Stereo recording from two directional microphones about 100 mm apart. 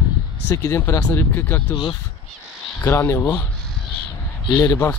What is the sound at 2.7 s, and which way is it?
Speech, 25° left (ahead or behind).